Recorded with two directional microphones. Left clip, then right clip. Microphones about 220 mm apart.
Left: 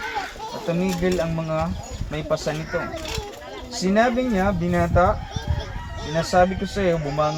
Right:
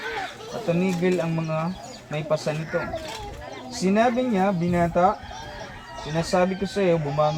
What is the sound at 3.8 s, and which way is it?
Speech, 15° right (ahead or behind).